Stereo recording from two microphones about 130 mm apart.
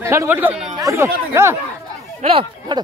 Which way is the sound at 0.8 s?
25° right (ahead or behind).